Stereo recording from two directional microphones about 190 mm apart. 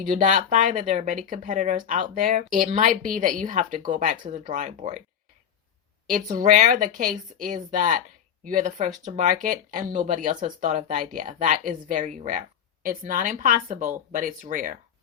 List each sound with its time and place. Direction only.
0.0 s speech: 45° right (ahead or behind)
6.3 s speech: 40° right (ahead or behind)